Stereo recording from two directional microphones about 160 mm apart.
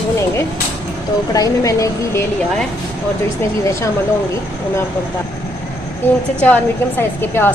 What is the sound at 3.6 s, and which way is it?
Speech, 20° left (ahead or behind).